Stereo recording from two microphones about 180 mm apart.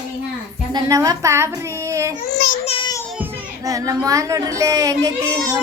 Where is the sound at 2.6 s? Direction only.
30° left (ahead or behind).